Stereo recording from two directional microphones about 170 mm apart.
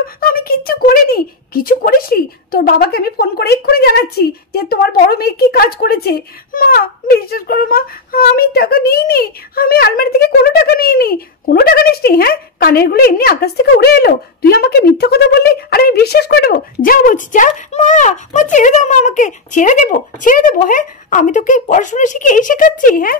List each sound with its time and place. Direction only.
0.0 s speech: 60° left (ahead or behind)